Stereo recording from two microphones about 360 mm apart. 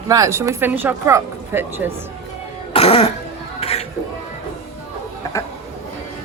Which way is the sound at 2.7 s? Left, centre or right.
Centre.